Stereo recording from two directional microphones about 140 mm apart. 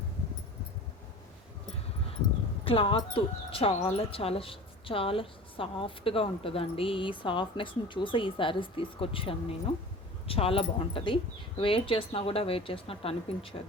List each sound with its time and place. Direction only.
2.6 s speech: 40° left (ahead or behind)